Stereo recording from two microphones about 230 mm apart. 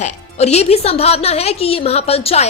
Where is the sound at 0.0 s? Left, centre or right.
Left.